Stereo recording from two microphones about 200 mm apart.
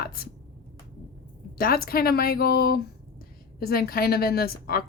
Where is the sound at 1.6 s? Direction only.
50° left (ahead or behind).